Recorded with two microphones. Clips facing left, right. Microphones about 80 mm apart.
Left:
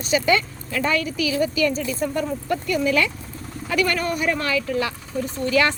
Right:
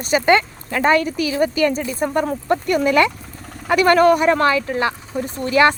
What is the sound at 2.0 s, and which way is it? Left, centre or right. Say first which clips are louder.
Speech: right 4 dB; right.